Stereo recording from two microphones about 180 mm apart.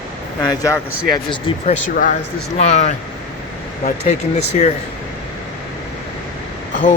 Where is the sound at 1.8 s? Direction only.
50° left (ahead or behind).